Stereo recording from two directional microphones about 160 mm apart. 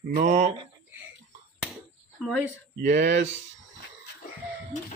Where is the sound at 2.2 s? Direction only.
Centre (ahead or behind).